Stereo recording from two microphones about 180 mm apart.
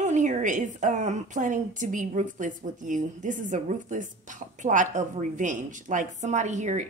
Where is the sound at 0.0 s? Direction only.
40° right (ahead or behind).